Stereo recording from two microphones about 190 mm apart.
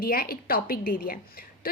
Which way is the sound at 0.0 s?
50° left (ahead or behind).